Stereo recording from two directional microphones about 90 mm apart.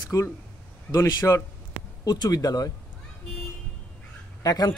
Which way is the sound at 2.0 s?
45° left (ahead or behind).